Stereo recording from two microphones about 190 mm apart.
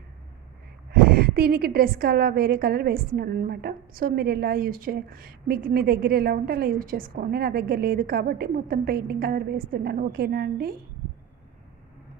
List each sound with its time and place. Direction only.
0.9 s a woman's voice: 50° right (ahead or behind)